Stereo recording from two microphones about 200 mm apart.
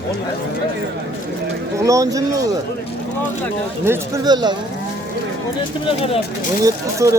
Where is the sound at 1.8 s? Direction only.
15° right (ahead or behind).